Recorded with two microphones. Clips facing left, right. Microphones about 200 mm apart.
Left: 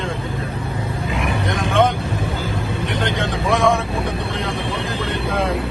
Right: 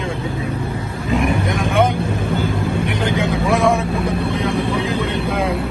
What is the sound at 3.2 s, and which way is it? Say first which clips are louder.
Speech: right 1 dB; centre (ahead or behind).